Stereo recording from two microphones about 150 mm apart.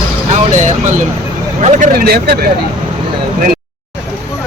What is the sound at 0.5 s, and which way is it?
Speech, 55° right (ahead or behind).